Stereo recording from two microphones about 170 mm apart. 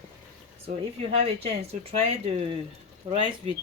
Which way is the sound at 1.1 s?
35° right (ahead or behind).